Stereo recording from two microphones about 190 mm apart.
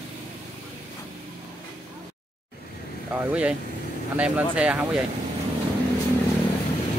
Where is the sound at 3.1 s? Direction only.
5° right (ahead or behind).